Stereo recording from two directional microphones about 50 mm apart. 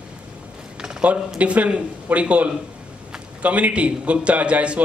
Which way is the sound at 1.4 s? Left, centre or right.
Right.